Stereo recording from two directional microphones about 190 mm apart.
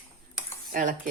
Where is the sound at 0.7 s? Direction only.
45° right (ahead or behind).